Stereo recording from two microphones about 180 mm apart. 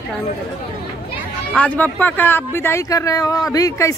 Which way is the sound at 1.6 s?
10° left (ahead or behind).